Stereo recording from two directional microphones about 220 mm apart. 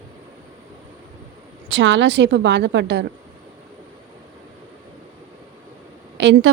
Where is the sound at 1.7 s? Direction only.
55° right (ahead or behind).